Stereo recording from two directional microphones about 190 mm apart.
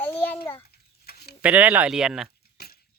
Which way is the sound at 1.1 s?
55° left (ahead or behind).